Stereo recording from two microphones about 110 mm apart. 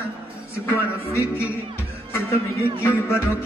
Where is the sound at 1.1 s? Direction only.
25° left (ahead or behind).